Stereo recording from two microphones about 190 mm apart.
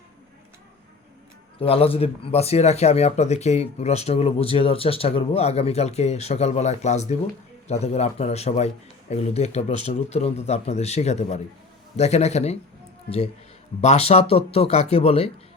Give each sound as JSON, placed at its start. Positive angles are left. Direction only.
{"t": 1.5, "sound": "speech", "side_deg": 30}